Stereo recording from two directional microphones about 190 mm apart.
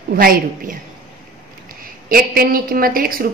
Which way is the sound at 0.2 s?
50° right (ahead or behind).